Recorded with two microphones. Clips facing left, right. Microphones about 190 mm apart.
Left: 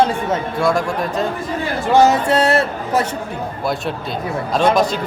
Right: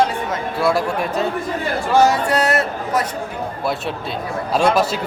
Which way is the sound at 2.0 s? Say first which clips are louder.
Left 2 dB; 25° left (ahead or behind).